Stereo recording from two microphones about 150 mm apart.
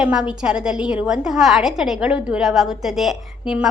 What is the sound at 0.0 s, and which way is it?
A woman's voice, 5° right (ahead or behind).